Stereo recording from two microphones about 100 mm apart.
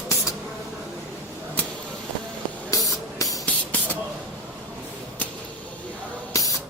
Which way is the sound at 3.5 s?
15° left (ahead or behind).